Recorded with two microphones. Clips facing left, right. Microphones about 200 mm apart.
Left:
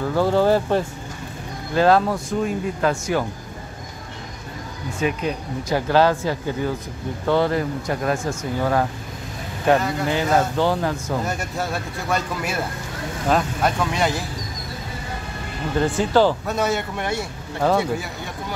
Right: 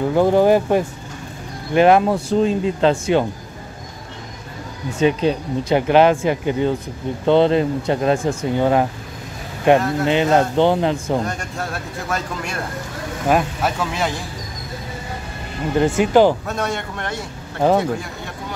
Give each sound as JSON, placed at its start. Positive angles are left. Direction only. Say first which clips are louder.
{"t": 0.0, "sound": "speech", "louder": "right 4 dB", "side_deg": -20}
{"t": 5.0, "sound": "speech", "louder": "right 7 dB", "side_deg": -30}
{"t": 9.8, "sound": "speech", "louder": "right 4 dB", "side_deg": 0}
{"t": 10.0, "sound": "speech", "louder": "right 5 dB", "side_deg": -20}
{"t": 11.2, "sound": "speech", "louder": "left 1 dB", "side_deg": 5}
{"t": 15.8, "sound": "speech", "louder": "right 4 dB", "side_deg": -15}
{"t": 16.4, "sound": "a man's voice", "louder": "left 2 dB", "side_deg": 0}